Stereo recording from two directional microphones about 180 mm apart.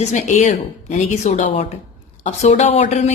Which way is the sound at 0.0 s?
40° left (ahead or behind).